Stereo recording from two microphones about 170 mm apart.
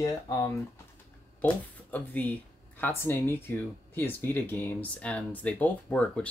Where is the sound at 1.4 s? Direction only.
10° left (ahead or behind).